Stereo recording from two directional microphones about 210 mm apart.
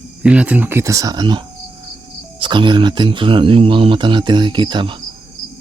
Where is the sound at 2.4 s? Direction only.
20° right (ahead or behind).